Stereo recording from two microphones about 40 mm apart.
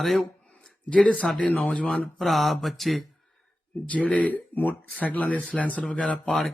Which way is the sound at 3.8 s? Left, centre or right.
Left.